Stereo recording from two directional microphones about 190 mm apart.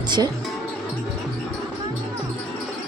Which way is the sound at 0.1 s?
25° right (ahead or behind).